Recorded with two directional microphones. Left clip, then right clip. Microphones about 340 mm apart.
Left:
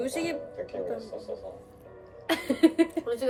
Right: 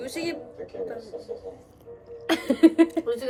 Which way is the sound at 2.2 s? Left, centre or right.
Right.